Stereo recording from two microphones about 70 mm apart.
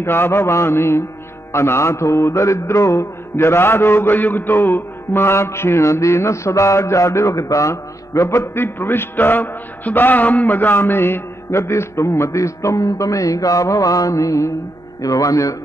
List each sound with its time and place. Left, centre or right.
0.0 s mantra: left
8.5 s mantra: left
15.0 s a man's voice: left